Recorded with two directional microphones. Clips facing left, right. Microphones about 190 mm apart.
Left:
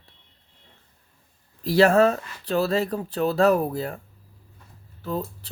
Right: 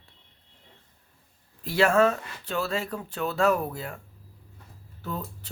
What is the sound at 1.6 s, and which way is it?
Speech, 35° left (ahead or behind).